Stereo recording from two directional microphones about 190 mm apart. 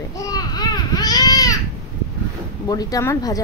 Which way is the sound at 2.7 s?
20° left (ahead or behind).